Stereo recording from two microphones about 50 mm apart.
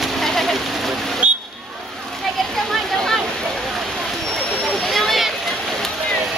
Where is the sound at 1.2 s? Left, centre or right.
Right.